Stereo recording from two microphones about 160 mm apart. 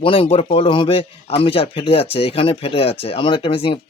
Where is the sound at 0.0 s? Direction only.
35° left (ahead or behind).